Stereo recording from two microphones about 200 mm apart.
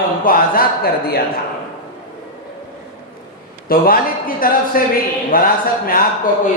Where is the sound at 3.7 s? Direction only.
45° left (ahead or behind).